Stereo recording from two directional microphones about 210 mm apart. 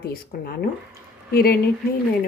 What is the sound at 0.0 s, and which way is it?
Speech, 45° left (ahead or behind).